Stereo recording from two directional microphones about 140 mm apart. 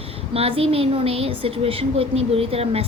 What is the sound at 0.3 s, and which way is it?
A woman's voice, 45° right (ahead or behind).